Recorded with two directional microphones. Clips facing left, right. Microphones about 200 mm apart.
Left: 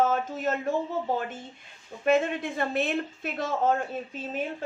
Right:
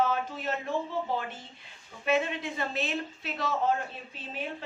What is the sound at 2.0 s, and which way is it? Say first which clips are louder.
A woman's voice: left 4 dB; 50° left (ahead or behind).